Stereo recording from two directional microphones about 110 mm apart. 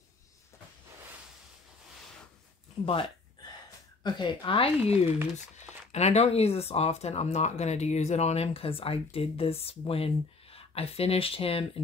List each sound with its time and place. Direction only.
2.8 s speech: 55° left (ahead or behind)
4.0 s speech: 45° left (ahead or behind); by 5.0 s 60° left (ahead or behind)
5.9 s speech: 85° left; by 11.6 s 60° left (ahead or behind)